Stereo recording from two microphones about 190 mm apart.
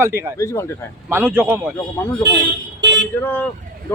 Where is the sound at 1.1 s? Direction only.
10° right (ahead or behind).